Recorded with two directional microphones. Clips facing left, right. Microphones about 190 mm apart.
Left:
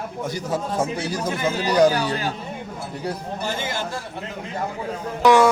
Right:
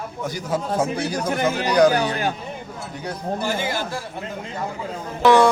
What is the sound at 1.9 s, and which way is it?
Speech, 55° right (ahead or behind).